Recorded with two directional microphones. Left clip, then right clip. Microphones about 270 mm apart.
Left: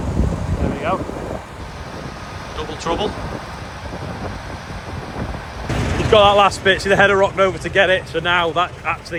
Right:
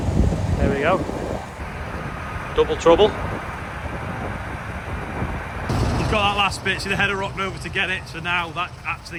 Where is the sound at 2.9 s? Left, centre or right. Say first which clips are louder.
Right 6 dB; left.